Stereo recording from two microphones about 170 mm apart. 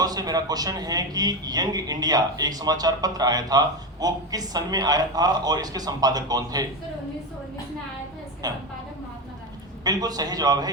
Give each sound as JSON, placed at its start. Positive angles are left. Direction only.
{"t": 0.0, "sound": "a man's voice", "side_deg": -20}
{"t": 8.4, "sound": "a man's voice", "side_deg": -20}
{"t": 9.8, "sound": "a man's voice", "side_deg": -20}